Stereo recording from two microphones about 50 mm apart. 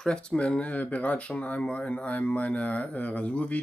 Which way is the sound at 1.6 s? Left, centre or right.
Left.